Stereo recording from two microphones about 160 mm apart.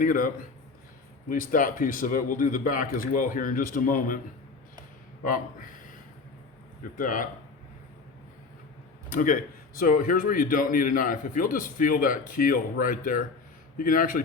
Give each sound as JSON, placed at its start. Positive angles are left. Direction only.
{"t": 0.0, "sound": "a man's voice", "side_deg": 55}
{"t": 1.3, "sound": "a man's voice", "side_deg": 60}
{"t": 6.9, "sound": "a man's voice", "side_deg": 55}
{"t": 9.0, "sound": "a man's voice", "side_deg": 60}